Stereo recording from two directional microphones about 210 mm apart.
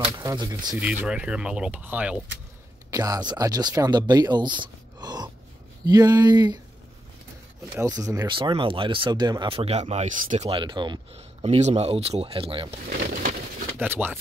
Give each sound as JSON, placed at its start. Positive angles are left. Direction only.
{"t": 0.2, "sound": "speech", "side_deg": -15}
{"t": 0.7, "sound": "speech", "side_deg": -5}
{"t": 2.9, "sound": "speech", "side_deg": -15}
{"t": 7.7, "sound": "speech", "side_deg": -15}
{"t": 13.0, "sound": "a sound", "side_deg": -40}
{"t": 13.7, "sound": "speech", "side_deg": -10}